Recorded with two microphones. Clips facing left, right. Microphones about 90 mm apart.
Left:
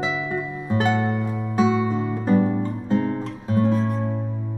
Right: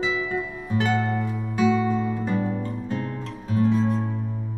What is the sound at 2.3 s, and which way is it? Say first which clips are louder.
Guitar: left 6 dB; 30° left (ahead or behind).